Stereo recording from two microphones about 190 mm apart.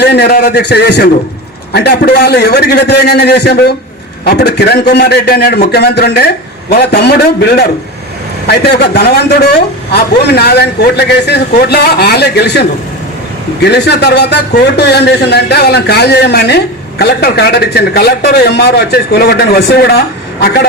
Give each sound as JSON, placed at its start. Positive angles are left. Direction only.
{"t": 0.0, "sound": "a man's voice", "side_deg": 60}